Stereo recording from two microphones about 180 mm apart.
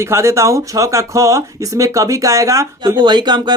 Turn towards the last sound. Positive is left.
turn(degrees=-25)  # may be behind; listen again after turning